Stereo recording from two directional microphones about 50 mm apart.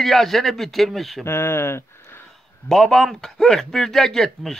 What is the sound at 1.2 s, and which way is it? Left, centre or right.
Speech, left.